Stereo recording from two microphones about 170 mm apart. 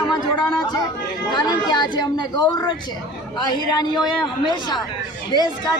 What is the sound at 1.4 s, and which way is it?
Speech, 25° left (ahead or behind).